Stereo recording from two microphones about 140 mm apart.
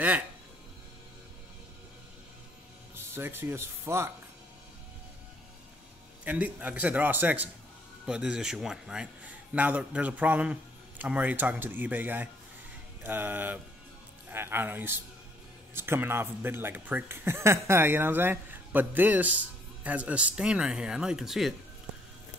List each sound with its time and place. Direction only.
2.9 s speech: 15° right (ahead or behind)
6.2 s speech: 10° right (ahead or behind)